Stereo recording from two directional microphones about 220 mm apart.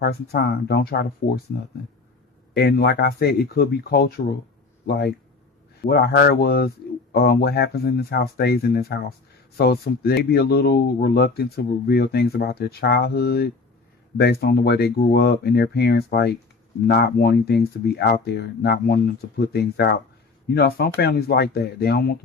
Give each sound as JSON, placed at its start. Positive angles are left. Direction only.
{"t": 0.0, "sound": "speech", "side_deg": 45}
{"t": 2.6, "sound": "speech", "side_deg": 45}